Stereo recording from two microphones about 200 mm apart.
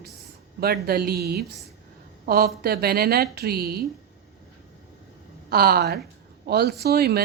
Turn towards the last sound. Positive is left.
turn(degrees=-50)  # may be behind; listen again after turning